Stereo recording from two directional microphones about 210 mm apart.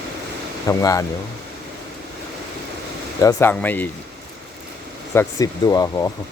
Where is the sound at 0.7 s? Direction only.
15° left (ahead or behind).